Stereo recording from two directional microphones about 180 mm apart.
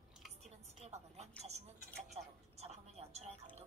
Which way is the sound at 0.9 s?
35° right (ahead or behind).